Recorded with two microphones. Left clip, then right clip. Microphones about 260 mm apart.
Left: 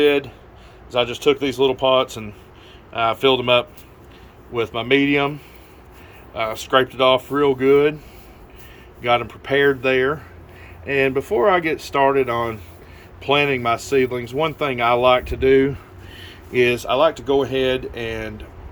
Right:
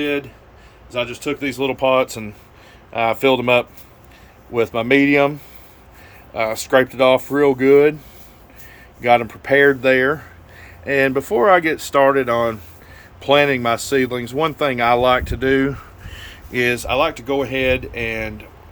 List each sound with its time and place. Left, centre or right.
0.0 s a man's voice: centre
1.1 s speech: right
1.8 s speech: centre
9.0 s speech: right